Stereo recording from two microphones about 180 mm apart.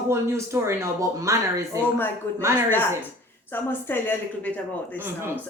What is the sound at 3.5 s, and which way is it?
A woman's voice, 10° left (ahead or behind).